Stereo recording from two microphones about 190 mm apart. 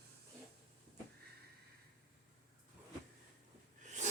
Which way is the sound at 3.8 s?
40° right (ahead or behind).